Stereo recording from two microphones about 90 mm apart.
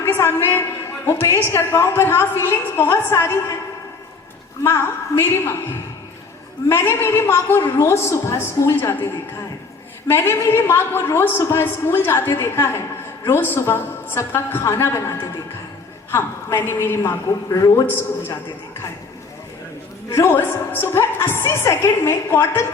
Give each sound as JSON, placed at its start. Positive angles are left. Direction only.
{"t": 0.0, "sound": "a sound", "side_deg": 30}
{"t": 1.0, "sound": "a woman's voice", "side_deg": 30}
{"t": 4.6, "sound": "a woman's voice", "side_deg": 25}
{"t": 6.7, "sound": "a woman's voice", "side_deg": 30}
{"t": 10.1, "sound": "a woman's voice", "side_deg": 30}
{"t": 17.8, "sound": "a woman's voice", "side_deg": 25}
{"t": 20.1, "sound": "a woman's voice", "side_deg": 30}